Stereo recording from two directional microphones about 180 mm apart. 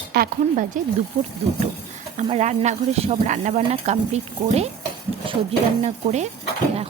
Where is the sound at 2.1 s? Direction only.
40° right (ahead or behind).